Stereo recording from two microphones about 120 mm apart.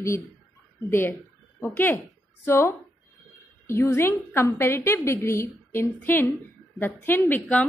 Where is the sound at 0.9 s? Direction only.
20° left (ahead or behind).